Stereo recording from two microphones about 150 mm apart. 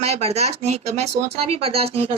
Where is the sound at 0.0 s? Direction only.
45° right (ahead or behind).